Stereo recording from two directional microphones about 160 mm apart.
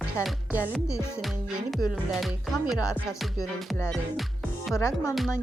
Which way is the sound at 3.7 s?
10° left (ahead or behind).